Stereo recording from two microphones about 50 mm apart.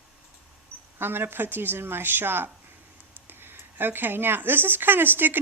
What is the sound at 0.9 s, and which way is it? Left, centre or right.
Speech, right.